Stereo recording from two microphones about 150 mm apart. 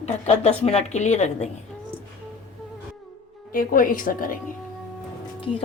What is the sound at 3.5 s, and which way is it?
Speech, 70° left (ahead or behind).